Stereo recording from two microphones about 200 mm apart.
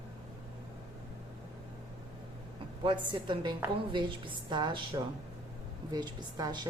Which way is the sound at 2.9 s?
25° right (ahead or behind).